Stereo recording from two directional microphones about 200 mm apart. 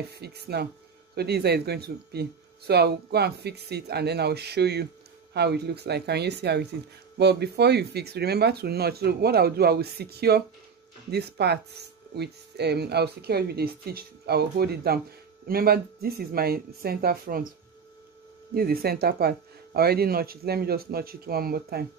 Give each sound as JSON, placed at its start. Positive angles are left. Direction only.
{"t": 0.1, "sound": "speech", "side_deg": -55}
{"t": 18.5, "sound": "speech", "side_deg": -50}